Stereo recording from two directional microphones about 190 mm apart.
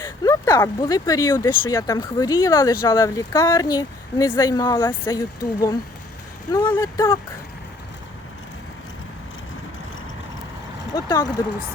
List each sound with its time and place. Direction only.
0.0 s a sound: 15° left (ahead or behind)
0.8 s speech: 20° left (ahead or behind)
6.7 s speech: 20° left (ahead or behind)
10.9 s speech: 20° left (ahead or behind)